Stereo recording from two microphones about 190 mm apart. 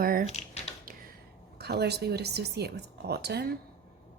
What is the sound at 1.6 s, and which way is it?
Chopping, 60° right (ahead or behind).